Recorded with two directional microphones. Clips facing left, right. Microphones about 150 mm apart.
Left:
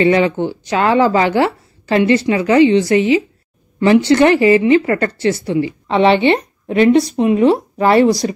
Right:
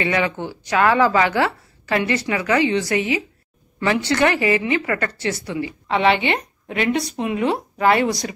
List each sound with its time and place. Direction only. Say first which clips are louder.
0.0 s a woman's voice: left 9 dB; 30° left (ahead or behind)